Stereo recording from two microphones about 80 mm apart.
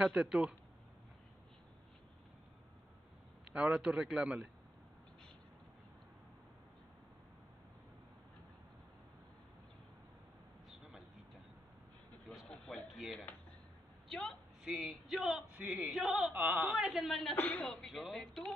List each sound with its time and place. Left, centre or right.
0.0 s a man's voice: centre
3.5 s a man's voice: centre
10.7 s a sound: centre
12.4 s a sound: centre
14.0 s speech: centre
15.5 s speech: right
15.9 s speech: centre
16.3 s a woman's voice: right
16.7 s speech: centre
17.4 s a man's voice: left
17.6 s speech: centre